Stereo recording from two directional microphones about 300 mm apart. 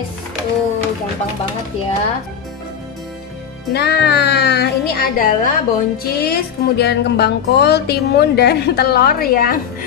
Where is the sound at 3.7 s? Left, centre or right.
Left.